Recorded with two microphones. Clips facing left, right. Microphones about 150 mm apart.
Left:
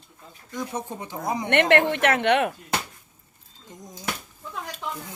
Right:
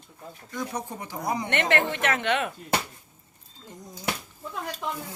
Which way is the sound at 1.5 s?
60° left (ahead or behind).